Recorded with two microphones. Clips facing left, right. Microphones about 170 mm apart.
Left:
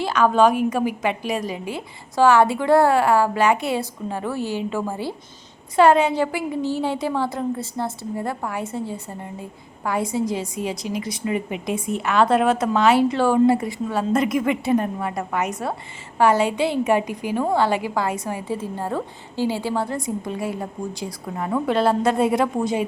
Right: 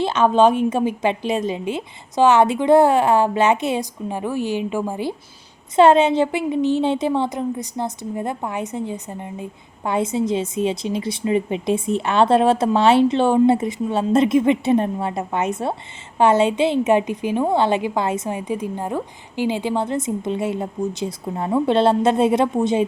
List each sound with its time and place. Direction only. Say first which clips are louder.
0.0 s a woman's voice: right 2 dB; 25° right (ahead or behind)